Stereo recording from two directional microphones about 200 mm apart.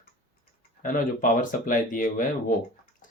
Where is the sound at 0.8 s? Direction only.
40° left (ahead or behind).